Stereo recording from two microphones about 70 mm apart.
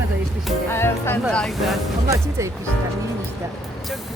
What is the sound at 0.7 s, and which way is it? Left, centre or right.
Speech, left.